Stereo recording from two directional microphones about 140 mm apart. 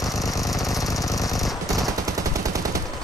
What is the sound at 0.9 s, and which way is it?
Jackhammer, 25° left (ahead or behind).